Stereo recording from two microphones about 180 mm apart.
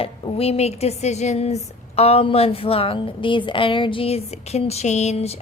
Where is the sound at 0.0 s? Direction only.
35° left (ahead or behind).